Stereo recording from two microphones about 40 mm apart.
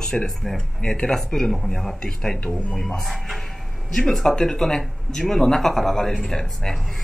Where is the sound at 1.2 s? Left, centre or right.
Centre.